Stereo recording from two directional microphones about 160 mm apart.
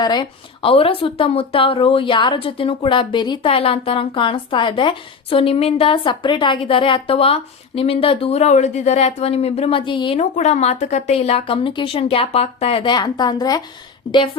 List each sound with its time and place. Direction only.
0.0 s speech: 25° left (ahead or behind)
10.2 s speech: 45° left (ahead or behind); by 13.6 s 25° left (ahead or behind)